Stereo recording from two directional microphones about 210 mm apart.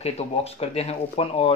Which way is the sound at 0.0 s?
30° left (ahead or behind).